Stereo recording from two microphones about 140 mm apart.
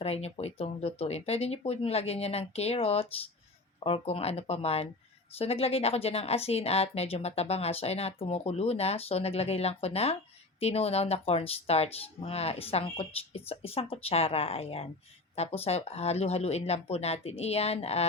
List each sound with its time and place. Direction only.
0.0 s speech: 45° left (ahead or behind)